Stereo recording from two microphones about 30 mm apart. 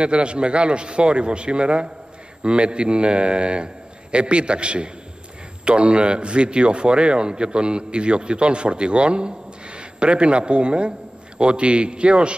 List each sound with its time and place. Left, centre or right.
0.0 s a man's voice: right